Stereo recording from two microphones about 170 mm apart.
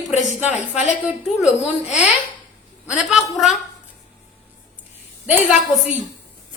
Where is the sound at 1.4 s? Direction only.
40° left (ahead or behind).